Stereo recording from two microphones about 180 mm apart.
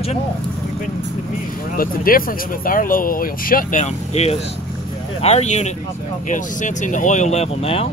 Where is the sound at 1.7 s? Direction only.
55° left (ahead or behind); by 7.8 s 35° left (ahead or behind).